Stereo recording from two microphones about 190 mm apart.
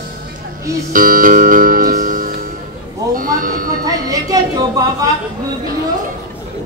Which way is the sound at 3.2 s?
45° right (ahead or behind).